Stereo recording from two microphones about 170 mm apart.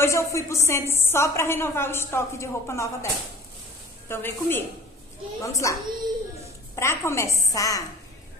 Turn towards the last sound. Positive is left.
turn(degrees=20)  # may be behind; listen again after turning